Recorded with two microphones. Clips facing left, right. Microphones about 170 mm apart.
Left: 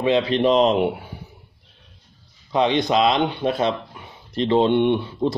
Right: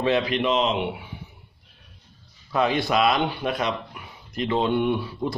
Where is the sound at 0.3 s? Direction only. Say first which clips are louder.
Left 6 dB; 35° left (ahead or behind).